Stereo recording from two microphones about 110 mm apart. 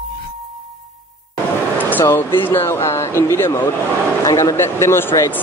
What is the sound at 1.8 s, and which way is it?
Speech, 15° left (ahead or behind).